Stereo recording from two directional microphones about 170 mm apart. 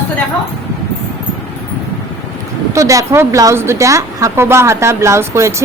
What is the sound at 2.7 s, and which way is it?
A woman's voice, 20° right (ahead or behind).